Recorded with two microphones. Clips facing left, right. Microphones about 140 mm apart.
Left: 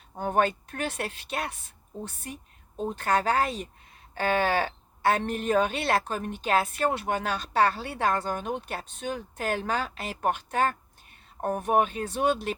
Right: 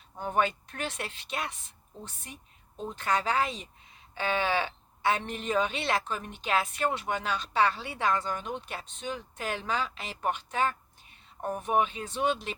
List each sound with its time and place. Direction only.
0.2 s speech: 45° left (ahead or behind)
2.7 s speech: 45° left (ahead or behind)